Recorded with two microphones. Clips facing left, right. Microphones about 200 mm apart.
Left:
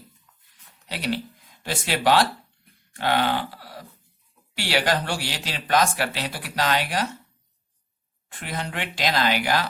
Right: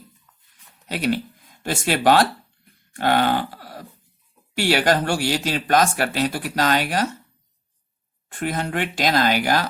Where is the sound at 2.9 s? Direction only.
45° right (ahead or behind).